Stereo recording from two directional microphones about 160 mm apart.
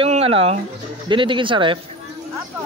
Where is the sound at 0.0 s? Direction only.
35° right (ahead or behind).